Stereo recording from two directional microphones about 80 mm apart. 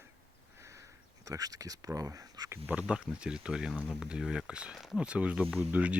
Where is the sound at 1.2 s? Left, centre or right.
Right.